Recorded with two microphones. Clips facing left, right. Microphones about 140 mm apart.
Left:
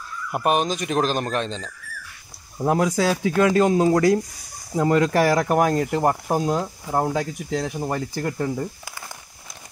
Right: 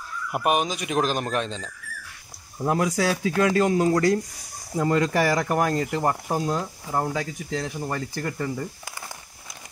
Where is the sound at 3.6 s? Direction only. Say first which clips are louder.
Left 3 dB; 25° left (ahead or behind).